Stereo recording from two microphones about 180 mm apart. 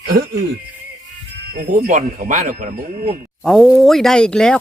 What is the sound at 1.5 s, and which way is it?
Speech, 55° right (ahead or behind).